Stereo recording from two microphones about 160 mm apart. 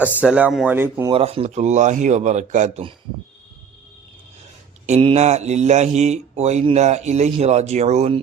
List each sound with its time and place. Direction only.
0.0 s speech: 10° right (ahead or behind)
1.1 s speech: 35° right (ahead or behind)
4.9 s speech: 40° right (ahead or behind)